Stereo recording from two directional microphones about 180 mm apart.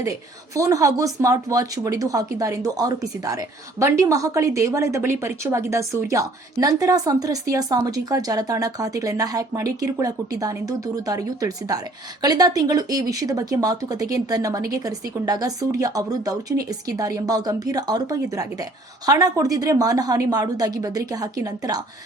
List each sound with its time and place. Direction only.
0.5 s speech: 15° right (ahead or behind)